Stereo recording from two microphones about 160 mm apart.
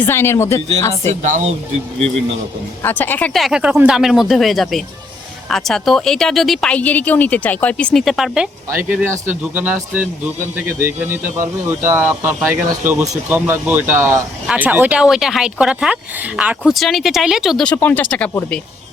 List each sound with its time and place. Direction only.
0.0 s speech: 15° left (ahead or behind)
1.2 s speech: 50° right (ahead or behind)
2.0 s a man's voice: 40° right (ahead or behind)
2.8 s speech: 10° left (ahead or behind)
8.7 s speech: 10° right (ahead or behind); by 18.3 s 10° left (ahead or behind)